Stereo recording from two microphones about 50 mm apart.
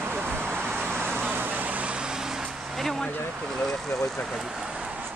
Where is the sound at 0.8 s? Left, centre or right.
Right.